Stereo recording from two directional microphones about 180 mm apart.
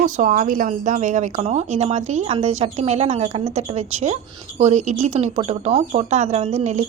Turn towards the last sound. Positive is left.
turn(degrees=-40)  # may be behind; listen again after turning